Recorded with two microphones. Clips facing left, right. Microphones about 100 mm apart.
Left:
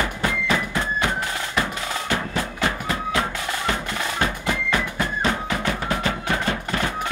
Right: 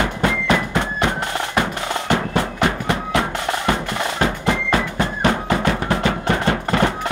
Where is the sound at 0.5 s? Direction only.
65° right (ahead or behind).